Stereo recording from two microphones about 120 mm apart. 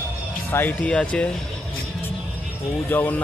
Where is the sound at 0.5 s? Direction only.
15° left (ahead or behind).